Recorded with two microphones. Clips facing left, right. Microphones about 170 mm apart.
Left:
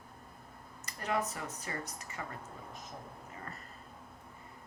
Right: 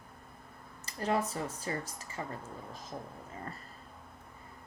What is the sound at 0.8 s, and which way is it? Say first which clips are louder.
Speech: right 3 dB; 30° right (ahead or behind).